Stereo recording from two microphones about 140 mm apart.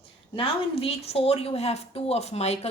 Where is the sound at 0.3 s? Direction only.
45° left (ahead or behind).